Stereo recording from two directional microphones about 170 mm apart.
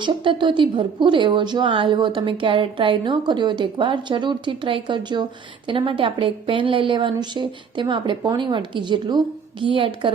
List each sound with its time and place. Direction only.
0.0 s a woman's voice: 25° right (ahead or behind)